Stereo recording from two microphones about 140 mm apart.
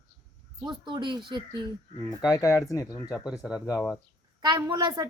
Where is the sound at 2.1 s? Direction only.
25° left (ahead or behind).